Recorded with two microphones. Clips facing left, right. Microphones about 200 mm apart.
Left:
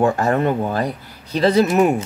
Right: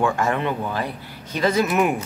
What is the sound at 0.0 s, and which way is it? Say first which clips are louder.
Speech: left 5 dB; 35° left (ahead or behind).